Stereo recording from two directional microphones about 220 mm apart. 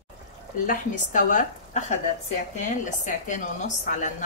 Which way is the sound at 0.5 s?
35° left (ahead or behind).